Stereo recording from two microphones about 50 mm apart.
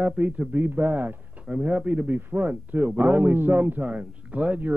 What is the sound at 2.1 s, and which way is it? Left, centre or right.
A man's voice, right.